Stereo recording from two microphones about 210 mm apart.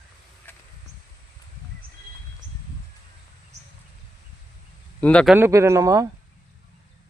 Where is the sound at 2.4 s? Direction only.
35° right (ahead or behind).